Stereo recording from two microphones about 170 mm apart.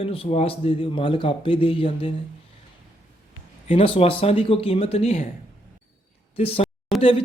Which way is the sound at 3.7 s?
35° left (ahead or behind).